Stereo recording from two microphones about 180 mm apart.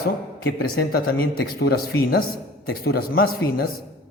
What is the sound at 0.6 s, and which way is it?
A man's voice, 60° left (ahead or behind).